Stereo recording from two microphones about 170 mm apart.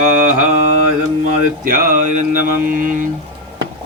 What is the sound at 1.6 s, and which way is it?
Mantra, 55° right (ahead or behind).